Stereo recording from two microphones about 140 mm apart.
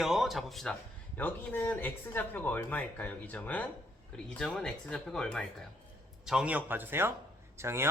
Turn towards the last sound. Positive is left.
turn(degrees=-20)  # may be behind; listen again after turning